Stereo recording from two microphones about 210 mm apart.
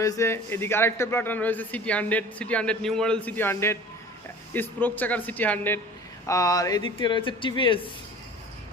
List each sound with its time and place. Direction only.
0.0 s a man's voice: 15° left (ahead or behind)